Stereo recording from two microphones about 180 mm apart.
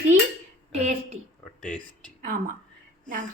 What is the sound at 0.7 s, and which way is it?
Speech, 35° right (ahead or behind).